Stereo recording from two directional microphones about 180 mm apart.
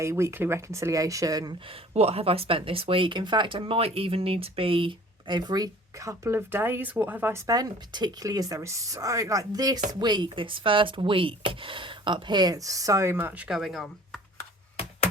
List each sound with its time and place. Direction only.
0.0 s speech: 15° right (ahead or behind); by 14.2 s centre (ahead or behind)